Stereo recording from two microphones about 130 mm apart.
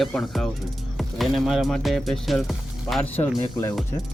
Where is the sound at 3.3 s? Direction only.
30° left (ahead or behind).